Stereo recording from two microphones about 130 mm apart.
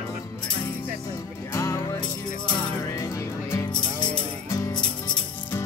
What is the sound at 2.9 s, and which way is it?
Music, 25° left (ahead or behind).